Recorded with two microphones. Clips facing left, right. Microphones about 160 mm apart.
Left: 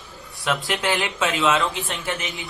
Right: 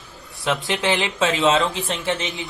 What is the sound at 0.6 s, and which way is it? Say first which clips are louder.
Speech: right 2 dB; 20° right (ahead or behind).